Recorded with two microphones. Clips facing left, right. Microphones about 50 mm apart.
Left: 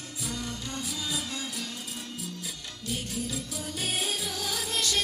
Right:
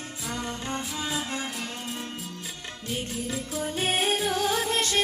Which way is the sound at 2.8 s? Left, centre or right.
Right.